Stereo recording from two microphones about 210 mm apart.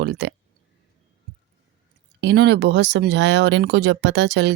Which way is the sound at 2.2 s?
50° right (ahead or behind).